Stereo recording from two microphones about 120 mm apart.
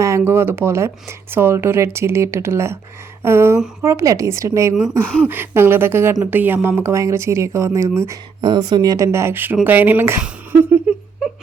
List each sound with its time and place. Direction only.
0.0 s a woman's voice: 20° right (ahead or behind)
8.4 s a woman's voice: 40° right (ahead or behind); by 10.9 s 15° right (ahead or behind)
11.2 s a sound: 5° right (ahead or behind)